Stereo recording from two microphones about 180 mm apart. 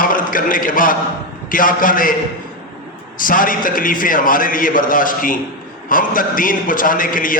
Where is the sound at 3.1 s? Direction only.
50° left (ahead or behind).